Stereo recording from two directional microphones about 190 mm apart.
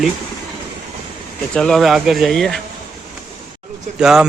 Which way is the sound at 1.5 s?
5° left (ahead or behind).